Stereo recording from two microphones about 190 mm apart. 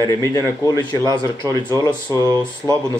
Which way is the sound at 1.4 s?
20° right (ahead or behind).